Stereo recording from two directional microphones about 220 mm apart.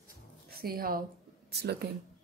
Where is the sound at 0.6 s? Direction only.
45° right (ahead or behind).